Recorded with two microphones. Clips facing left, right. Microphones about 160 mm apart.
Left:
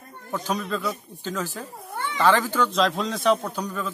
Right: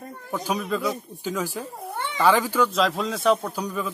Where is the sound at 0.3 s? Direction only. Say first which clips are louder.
Right 1 dB; 10° right (ahead or behind).